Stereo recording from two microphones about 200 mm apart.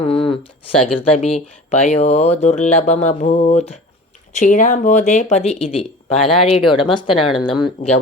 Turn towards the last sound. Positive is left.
turn(degrees=25)  # may be behind; listen again after turning